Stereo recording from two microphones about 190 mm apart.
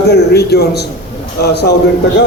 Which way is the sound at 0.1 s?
60° left (ahead or behind).